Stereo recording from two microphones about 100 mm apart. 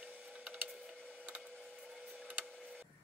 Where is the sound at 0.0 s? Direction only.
10° right (ahead or behind).